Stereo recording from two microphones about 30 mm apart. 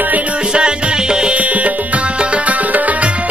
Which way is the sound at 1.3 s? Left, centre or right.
Right.